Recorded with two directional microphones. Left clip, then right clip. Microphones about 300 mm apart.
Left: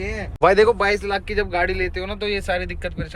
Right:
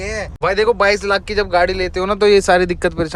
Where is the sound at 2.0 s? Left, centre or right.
Right.